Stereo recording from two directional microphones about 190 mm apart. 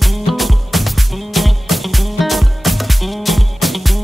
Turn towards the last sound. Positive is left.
turn(degrees=0)  # may be behind; listen again after turning